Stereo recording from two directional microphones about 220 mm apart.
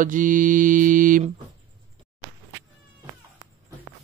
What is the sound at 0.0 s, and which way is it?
Speech, 35° right (ahead or behind).